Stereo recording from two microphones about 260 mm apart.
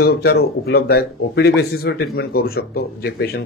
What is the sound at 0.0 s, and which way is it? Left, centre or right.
Speech, left.